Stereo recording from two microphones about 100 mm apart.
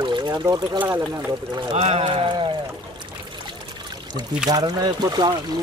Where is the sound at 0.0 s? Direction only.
50° right (ahead or behind).